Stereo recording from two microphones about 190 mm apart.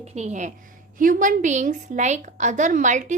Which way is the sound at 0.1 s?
35° right (ahead or behind).